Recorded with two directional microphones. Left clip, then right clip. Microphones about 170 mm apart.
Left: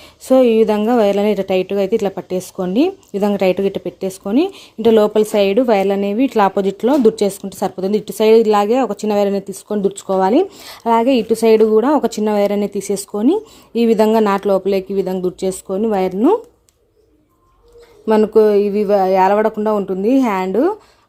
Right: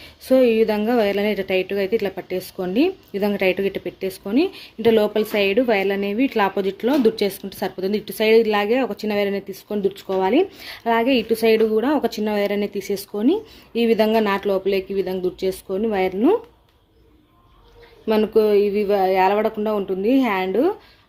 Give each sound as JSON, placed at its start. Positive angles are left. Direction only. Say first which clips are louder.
{"t": 0.0, "sound": "speech", "louder": "left 4 dB", "side_deg": 55}
{"t": 18.0, "sound": "speech", "louder": "left 6 dB", "side_deg": 45}